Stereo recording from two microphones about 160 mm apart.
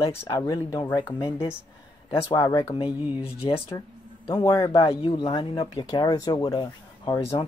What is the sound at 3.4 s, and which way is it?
Speech, 35° left (ahead or behind).